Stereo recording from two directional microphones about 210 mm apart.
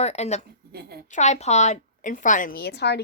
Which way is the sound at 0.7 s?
50° right (ahead or behind).